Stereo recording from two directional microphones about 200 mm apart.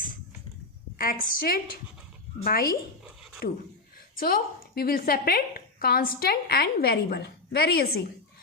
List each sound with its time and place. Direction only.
0.9 s a woman's voice: 45° left (ahead or behind)
3.0 s a sound: centre (ahead or behind)
4.2 s a woman's voice: 50° left (ahead or behind)